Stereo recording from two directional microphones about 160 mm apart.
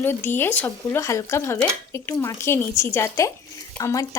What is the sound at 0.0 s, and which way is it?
A woman's voice, 15° left (ahead or behind).